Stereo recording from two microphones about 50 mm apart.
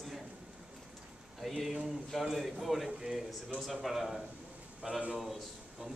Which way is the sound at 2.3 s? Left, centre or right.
Centre.